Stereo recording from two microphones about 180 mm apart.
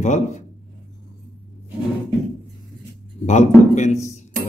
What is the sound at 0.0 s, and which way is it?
Speech, 40° left (ahead or behind).